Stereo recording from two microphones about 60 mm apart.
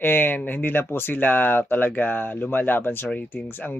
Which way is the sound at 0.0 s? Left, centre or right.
Left.